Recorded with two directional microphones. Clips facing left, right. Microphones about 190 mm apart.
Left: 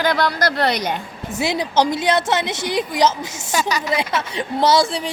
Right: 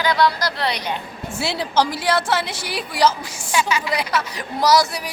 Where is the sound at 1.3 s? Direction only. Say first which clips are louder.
Left 2 dB; 15° left (ahead or behind).